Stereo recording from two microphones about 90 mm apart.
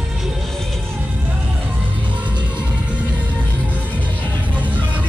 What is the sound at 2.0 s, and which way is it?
Music, 15° right (ahead or behind).